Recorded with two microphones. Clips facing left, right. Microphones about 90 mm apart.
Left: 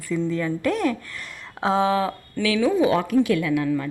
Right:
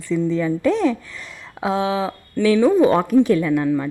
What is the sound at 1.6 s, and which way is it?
Speech, 5° right (ahead or behind).